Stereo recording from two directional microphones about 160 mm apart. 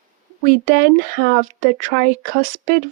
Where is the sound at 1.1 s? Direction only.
55° right (ahead or behind).